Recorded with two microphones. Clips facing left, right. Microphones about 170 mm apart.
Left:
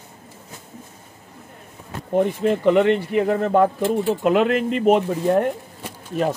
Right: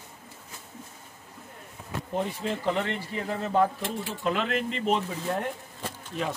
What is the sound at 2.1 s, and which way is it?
Speech, 55° left (ahead or behind).